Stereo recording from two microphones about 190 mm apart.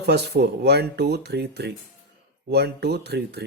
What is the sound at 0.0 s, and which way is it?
Speech, 60° right (ahead or behind).